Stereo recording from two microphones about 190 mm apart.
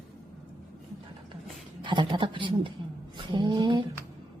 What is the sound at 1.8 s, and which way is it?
A woman's voice, 25° right (ahead or behind).